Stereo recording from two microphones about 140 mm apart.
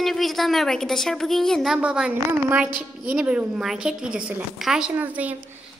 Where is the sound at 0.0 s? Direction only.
Centre (ahead or behind).